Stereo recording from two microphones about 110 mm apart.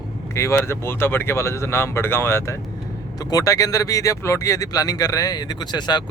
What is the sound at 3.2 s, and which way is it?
Speech, 35° left (ahead or behind).